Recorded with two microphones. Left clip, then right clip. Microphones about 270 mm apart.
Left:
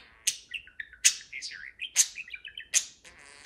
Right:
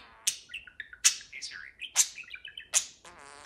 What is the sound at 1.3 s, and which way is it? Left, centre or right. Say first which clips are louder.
Bird: left 2 dB; centre.